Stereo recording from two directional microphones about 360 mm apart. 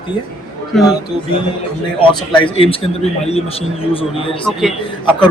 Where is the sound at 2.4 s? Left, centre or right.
Centre.